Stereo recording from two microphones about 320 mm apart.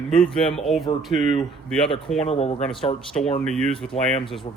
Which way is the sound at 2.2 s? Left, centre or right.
Centre.